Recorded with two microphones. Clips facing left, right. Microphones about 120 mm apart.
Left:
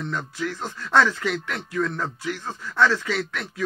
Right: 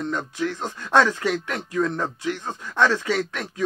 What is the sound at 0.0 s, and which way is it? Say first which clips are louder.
Speech: right 3 dB; 20° right (ahead or behind).